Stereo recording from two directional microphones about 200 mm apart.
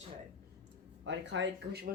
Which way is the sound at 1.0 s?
65° right (ahead or behind).